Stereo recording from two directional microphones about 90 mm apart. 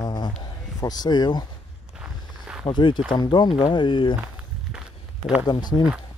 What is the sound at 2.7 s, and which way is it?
Speech, 65° left (ahead or behind).